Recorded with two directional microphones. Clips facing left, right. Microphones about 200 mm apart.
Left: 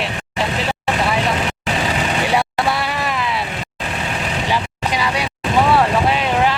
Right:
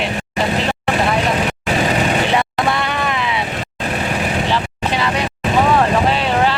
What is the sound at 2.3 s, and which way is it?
Vehicle, 5° left (ahead or behind).